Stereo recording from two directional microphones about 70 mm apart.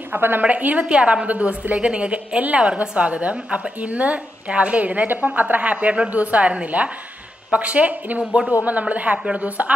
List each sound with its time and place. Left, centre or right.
0.1 s a woman's voice: right